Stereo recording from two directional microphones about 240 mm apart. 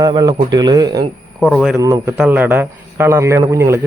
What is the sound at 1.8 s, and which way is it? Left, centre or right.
Speech, centre.